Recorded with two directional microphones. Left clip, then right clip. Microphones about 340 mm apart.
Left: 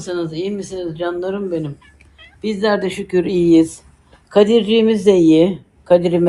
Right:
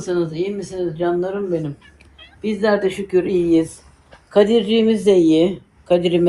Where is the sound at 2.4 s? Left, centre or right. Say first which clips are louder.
Even; left.